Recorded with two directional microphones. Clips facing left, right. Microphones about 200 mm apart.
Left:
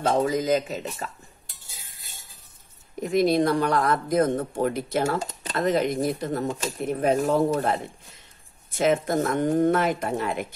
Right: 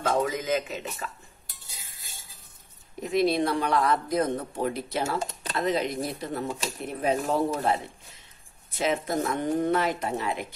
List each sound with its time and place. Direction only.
0.1 s speech: 35° left (ahead or behind)
3.0 s speech: 45° left (ahead or behind)